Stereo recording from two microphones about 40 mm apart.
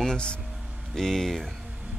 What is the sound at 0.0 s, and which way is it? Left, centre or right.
Speech, left.